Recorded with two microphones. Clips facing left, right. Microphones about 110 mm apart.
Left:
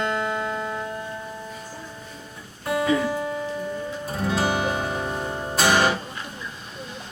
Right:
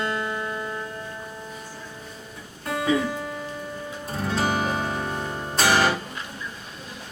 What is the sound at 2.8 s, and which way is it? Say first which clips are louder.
Music: even; 15° right (ahead or behind).